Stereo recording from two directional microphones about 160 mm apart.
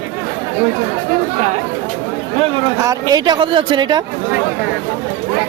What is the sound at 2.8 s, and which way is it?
Speech, 20° right (ahead or behind).